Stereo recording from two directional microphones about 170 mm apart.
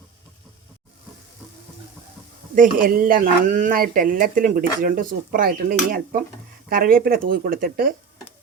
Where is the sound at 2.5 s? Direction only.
55° right (ahead or behind).